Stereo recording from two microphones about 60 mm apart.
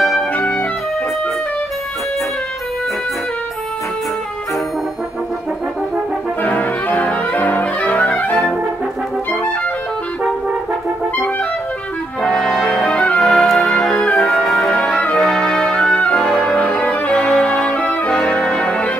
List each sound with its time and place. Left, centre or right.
0.3 s music: left
6.4 s music: left
12.2 s brass instrument: centre
13.2 s music: centre
16.8 s music: left
17.1 s brass instrument: centre
18.6 s music: left